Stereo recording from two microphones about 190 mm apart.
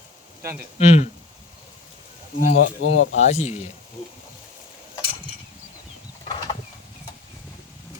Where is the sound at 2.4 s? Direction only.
40° left (ahead or behind).